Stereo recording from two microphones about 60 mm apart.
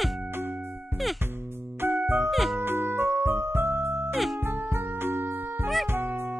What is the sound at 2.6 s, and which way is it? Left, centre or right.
Music, right.